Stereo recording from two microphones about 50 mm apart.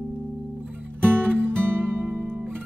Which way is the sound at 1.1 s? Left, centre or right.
Right.